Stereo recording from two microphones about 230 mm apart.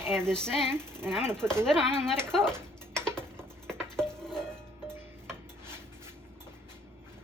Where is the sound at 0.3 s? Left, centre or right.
Centre.